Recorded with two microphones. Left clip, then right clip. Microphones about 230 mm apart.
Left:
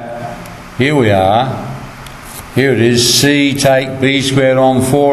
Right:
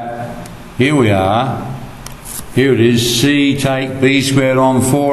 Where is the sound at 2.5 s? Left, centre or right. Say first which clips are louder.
Left 1 dB; left.